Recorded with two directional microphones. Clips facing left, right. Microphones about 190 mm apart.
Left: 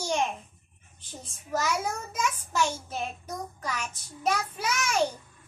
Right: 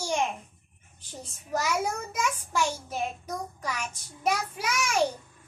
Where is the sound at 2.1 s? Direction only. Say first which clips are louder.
Right 1 dB; 10° right (ahead or behind).